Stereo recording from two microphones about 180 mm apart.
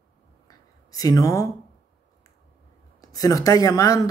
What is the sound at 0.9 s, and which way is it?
Speech, 20° left (ahead or behind).